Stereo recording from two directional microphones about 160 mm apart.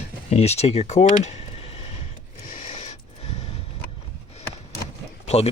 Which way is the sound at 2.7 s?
40° left (ahead or behind).